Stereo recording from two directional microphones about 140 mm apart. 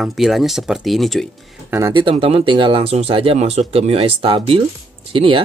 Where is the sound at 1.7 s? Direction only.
25° right (ahead or behind).